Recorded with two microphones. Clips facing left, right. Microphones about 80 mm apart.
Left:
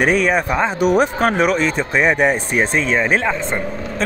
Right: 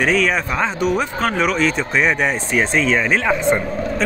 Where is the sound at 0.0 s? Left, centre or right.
Centre.